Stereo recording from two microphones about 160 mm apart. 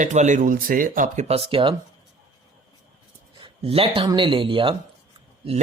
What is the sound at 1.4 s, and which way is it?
Speech, 30° right (ahead or behind).